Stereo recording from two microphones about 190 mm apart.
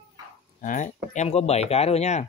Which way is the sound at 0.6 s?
45° left (ahead or behind).